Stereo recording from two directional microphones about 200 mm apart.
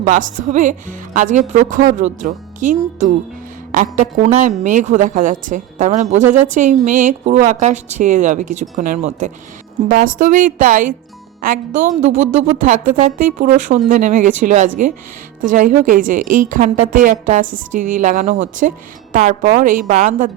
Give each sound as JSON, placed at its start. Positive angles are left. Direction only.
{"t": 0.0, "sound": "a woman's voice", "side_deg": -40}